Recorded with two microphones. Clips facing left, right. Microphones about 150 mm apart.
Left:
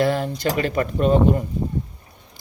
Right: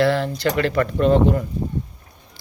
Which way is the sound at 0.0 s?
15° left (ahead or behind).